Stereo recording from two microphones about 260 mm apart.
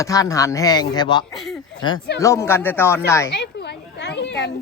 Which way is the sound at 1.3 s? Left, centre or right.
Centre.